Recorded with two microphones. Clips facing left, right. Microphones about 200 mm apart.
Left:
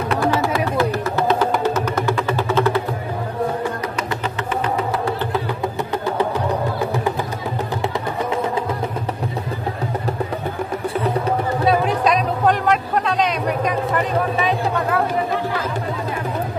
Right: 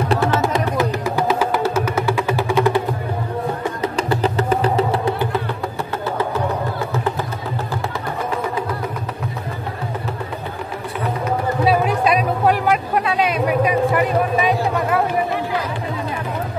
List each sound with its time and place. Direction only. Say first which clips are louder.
0.1 s music: left 1 dB; 25° right (ahead or behind)
0.7 s vehicle: even; 10° right (ahead or behind)
4.1 s music: right 6 dB; 35° right (ahead or behind)
11.6 s a sound: right 1 dB; 5° right (ahead or behind)